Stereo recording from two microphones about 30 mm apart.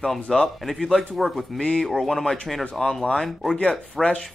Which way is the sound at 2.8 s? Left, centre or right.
Centre.